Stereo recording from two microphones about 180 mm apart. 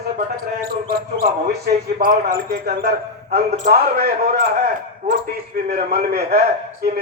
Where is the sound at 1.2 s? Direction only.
60° right (ahead or behind).